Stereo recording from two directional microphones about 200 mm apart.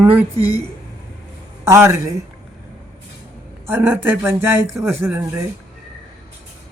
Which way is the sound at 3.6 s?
10° right (ahead or behind).